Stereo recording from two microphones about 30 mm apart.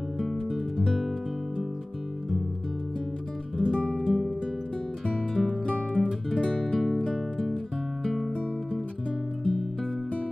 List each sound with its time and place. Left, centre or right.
0.4 s music: centre
3.6 s music: left
4.0 s music: centre
5.3 s music: left
8.0 s music: centre
9.4 s music: centre